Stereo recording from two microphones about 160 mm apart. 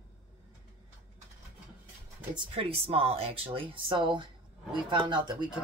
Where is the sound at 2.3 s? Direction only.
35° right (ahead or behind).